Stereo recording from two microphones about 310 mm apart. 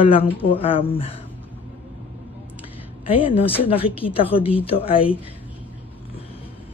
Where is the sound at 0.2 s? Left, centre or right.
Centre.